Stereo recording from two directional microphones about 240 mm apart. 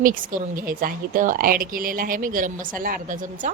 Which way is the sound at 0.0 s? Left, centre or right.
Right.